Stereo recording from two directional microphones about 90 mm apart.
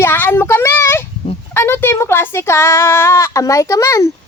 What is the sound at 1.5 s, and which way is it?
A man's voice, 25° left (ahead or behind).